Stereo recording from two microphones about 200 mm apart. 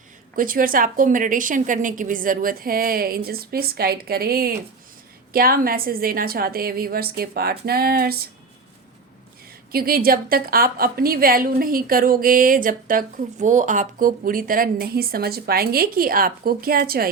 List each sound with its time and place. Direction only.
0.3 s a woman's voice: 45° right (ahead or behind)
9.7 s a woman's voice: 50° right (ahead or behind)